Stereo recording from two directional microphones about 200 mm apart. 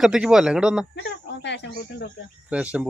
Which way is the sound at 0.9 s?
60° left (ahead or behind).